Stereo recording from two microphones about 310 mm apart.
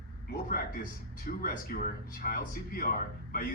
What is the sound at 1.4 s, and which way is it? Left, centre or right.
Speech, left.